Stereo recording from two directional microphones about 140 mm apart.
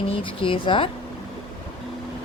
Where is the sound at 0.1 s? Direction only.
40° left (ahead or behind).